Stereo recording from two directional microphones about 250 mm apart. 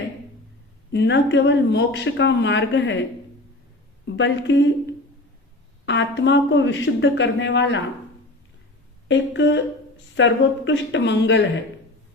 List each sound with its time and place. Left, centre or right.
0.9 s speech: left
4.0 s speech: left
5.8 s speech: left
9.0 s speech: left